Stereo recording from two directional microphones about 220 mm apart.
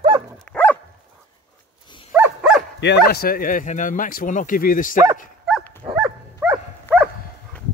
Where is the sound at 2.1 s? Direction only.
5° right (ahead or behind).